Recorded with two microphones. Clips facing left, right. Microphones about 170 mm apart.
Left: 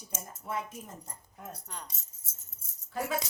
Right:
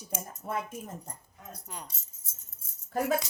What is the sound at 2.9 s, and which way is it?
Speech, 45° right (ahead or behind).